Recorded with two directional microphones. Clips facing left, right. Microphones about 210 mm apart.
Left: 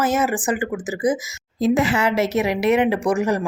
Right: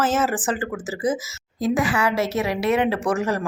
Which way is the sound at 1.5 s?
25° left (ahead or behind).